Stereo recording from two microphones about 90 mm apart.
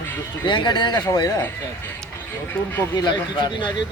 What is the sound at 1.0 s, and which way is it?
Speech, 45° left (ahead or behind).